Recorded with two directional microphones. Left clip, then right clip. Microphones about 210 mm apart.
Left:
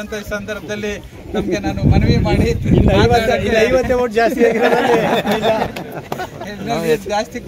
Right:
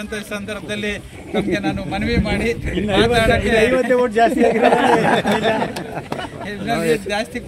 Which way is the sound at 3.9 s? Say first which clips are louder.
Even; 50° left (ahead or behind).